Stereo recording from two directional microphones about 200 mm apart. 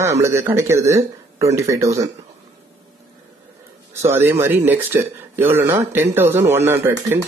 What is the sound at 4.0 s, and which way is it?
A man's voice, 10° right (ahead or behind).